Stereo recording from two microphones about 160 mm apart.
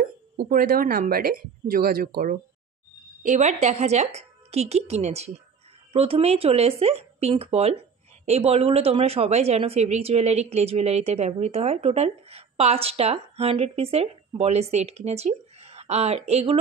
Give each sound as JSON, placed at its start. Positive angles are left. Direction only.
{"t": 0.0, "sound": "speech", "side_deg": -65}
{"t": 3.2, "sound": "speech", "side_deg": -50}